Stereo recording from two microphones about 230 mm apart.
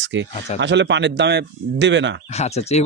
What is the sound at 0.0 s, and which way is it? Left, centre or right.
Speech, right.